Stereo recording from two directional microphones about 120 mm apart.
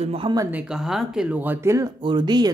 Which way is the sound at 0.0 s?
55° right (ahead or behind).